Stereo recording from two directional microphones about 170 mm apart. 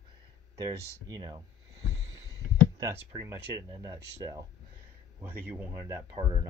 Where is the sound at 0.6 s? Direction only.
25° right (ahead or behind).